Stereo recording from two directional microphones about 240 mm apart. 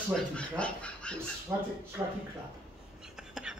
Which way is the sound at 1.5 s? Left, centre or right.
Centre.